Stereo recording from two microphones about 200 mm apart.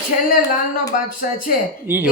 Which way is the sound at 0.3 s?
45° left (ahead or behind).